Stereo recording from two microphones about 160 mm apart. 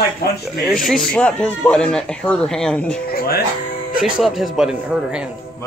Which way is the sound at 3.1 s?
70° left (ahead or behind).